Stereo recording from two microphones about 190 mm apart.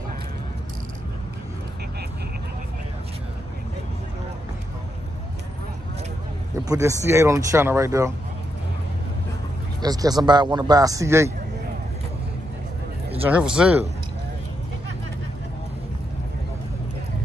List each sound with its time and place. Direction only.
6.6 s speech: 15° right (ahead or behind)
9.8 s speech: 20° right (ahead or behind)
13.1 s speech: 10° right (ahead or behind)